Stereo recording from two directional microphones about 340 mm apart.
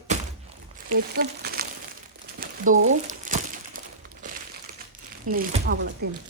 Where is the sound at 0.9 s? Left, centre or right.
Right.